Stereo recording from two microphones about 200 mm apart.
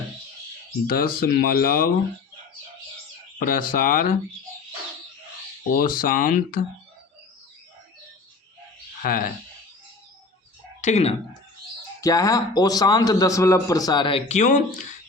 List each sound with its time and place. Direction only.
0.9 s speech: 50° left (ahead or behind)
3.3 s speech: 45° left (ahead or behind)
5.7 s speech: 45° left (ahead or behind)
9.0 s speech: 45° left (ahead or behind)
10.8 s speech: 35° left (ahead or behind)
11.9 s a man's voice: 15° left (ahead or behind); by 14.8 s 35° left (ahead or behind)